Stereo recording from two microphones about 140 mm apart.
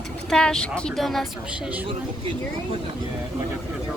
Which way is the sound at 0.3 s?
5° left (ahead or behind).